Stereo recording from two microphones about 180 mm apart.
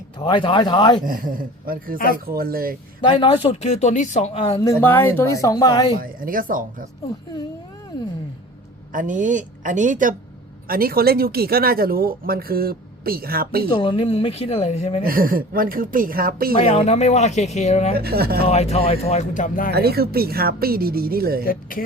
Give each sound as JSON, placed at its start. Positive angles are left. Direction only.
{"t": 0.2, "sound": "speech", "side_deg": 30}
{"t": 1.0, "sound": "a woman's voice", "side_deg": -50}
{"t": 3.2, "sound": "speech", "side_deg": 30}
{"t": 4.6, "sound": "speech", "side_deg": 15}
{"t": 6.0, "sound": "a woman's voice", "side_deg": -50}
{"t": 8.9, "sound": "a woman's voice", "side_deg": -50}
{"t": 13.7, "sound": "speech", "side_deg": 30}
{"t": 15.0, "sound": "a woman's voice", "side_deg": -55}
{"t": 16.6, "sound": "speech", "side_deg": 35}
{"t": 17.9, "sound": "speech", "side_deg": -60}
{"t": 18.4, "sound": "speech", "side_deg": 35}
{"t": 19.7, "sound": "speech", "side_deg": -60}
{"t": 21.4, "sound": "speech", "side_deg": 50}